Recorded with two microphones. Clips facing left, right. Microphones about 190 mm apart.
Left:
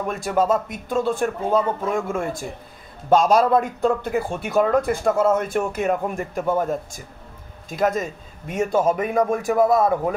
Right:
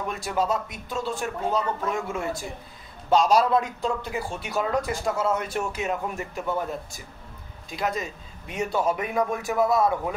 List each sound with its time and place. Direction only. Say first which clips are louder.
0.1 s speech: left 6 dB; 50° left (ahead or behind)